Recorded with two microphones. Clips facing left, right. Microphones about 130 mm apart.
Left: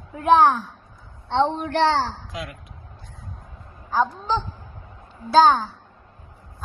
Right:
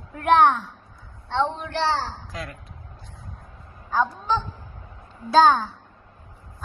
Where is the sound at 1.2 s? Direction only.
40° left (ahead or behind).